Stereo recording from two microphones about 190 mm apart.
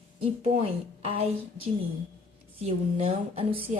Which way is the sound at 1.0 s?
30° right (ahead or behind).